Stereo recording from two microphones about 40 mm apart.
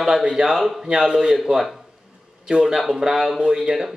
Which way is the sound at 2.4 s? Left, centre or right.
Right.